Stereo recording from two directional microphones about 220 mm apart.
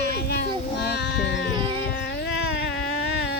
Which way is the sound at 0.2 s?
45° left (ahead or behind).